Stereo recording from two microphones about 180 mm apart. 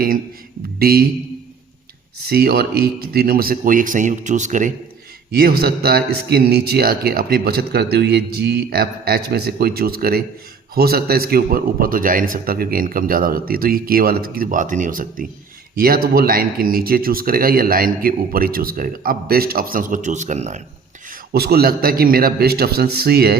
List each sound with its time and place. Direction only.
0.8 s a man's voice: 55° right (ahead or behind)
2.2 s a man's voice: 60° right (ahead or behind)
5.3 s a man's voice: 60° right (ahead or behind); by 20.6 s 40° right (ahead or behind)
21.1 s a man's voice: 60° right (ahead or behind)